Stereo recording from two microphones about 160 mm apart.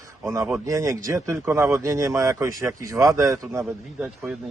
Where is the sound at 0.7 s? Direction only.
20° right (ahead or behind).